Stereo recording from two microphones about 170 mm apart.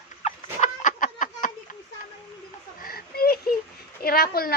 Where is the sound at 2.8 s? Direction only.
60° left (ahead or behind).